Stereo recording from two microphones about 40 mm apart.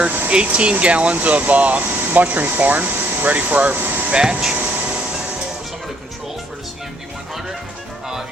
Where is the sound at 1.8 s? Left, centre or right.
Right.